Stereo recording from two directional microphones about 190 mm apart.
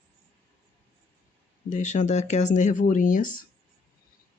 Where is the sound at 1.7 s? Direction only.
40° left (ahead or behind).